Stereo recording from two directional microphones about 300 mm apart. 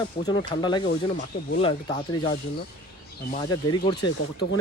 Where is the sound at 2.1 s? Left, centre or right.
Centre.